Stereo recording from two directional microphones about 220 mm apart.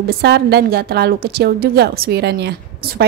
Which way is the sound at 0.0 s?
45° right (ahead or behind).